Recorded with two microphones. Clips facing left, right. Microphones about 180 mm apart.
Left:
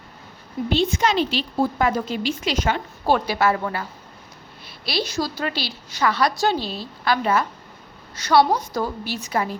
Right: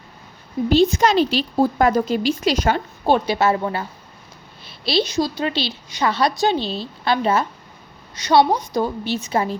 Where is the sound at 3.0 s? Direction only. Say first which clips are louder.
Right 2 dB; 25° right (ahead or behind).